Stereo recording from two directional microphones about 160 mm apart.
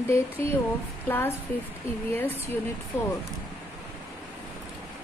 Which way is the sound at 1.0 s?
15° left (ahead or behind).